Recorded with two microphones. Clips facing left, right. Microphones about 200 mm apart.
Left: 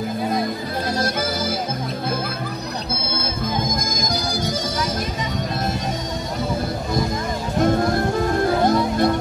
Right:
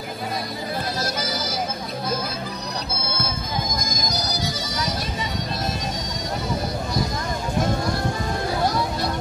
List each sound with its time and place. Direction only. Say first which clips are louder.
8.6 s music: left 6 dB; 50° left (ahead or behind)